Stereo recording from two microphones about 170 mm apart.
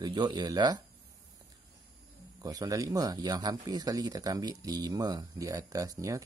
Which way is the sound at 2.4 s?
20° right (ahead or behind).